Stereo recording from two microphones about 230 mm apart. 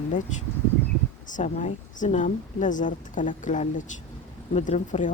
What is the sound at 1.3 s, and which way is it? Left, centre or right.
Speech, left.